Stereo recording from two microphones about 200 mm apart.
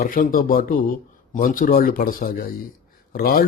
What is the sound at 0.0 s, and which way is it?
Speech, 45° left (ahead or behind).